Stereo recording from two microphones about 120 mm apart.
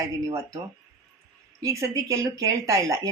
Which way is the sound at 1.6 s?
25° right (ahead or behind).